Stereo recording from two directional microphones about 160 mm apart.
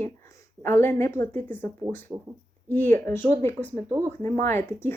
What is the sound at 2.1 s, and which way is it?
Speech, 20° right (ahead or behind).